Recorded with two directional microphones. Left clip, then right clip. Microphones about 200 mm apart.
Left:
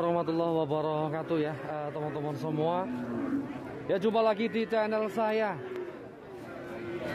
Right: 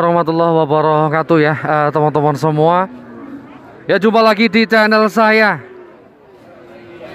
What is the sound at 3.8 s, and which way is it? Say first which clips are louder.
Speech: right 16 dB; 25° right (ahead or behind).